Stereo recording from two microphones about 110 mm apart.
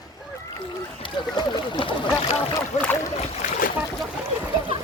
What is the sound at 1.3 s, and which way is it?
Speech, 40° left (ahead or behind).